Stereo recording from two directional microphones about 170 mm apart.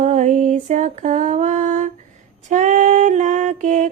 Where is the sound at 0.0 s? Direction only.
45° right (ahead or behind).